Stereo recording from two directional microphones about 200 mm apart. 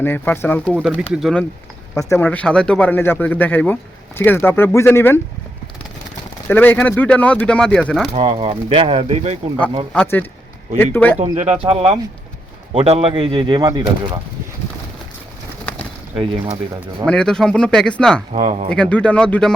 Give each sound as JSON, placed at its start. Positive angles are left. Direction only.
{"t": 0.0, "sound": "speech", "side_deg": 10}
{"t": 0.7, "sound": "speech", "side_deg": -5}
{"t": 2.0, "sound": "speech", "side_deg": 15}
{"t": 6.5, "sound": "speech", "side_deg": 10}
{"t": 8.1, "sound": "speech", "side_deg": -25}
{"t": 9.9, "sound": "speech", "side_deg": 5}
{"t": 11.2, "sound": "speech", "side_deg": -35}
{"t": 16.1, "sound": "speech", "side_deg": -30}
{"t": 17.1, "sound": "speech", "side_deg": 5}
{"t": 18.3, "sound": "speech", "side_deg": -35}
{"t": 18.7, "sound": "speech", "side_deg": 5}